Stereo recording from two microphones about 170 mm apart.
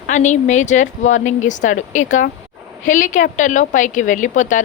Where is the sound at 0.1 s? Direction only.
45° left (ahead or behind).